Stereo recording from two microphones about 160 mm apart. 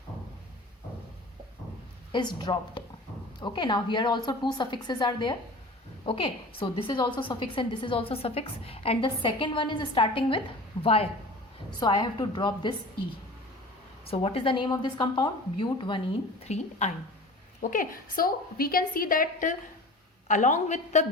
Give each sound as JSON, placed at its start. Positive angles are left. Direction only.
{"t": 2.1, "sound": "a woman's voice", "side_deg": 30}
{"t": 14.1, "sound": "a woman's voice", "side_deg": 35}
{"t": 16.5, "sound": "a woman's voice", "side_deg": 45}
{"t": 17.6, "sound": "a woman's voice", "side_deg": 60}